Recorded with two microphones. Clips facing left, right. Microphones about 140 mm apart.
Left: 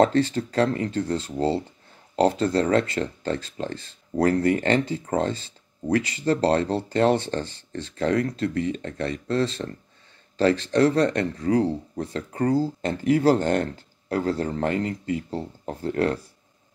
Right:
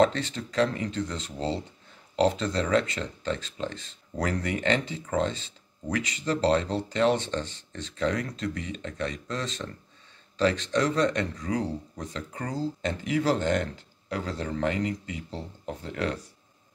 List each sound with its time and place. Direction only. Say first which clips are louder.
0.0 s speech: left 4 dB; 35° left (ahead or behind)
2.4 s speech: left 5 dB; 35° left (ahead or behind)